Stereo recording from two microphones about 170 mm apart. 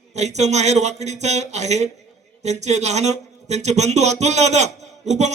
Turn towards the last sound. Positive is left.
turn(degrees=-40)  # may be behind; listen again after turning